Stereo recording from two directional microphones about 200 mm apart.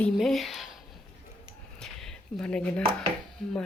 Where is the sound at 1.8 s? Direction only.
5° left (ahead or behind).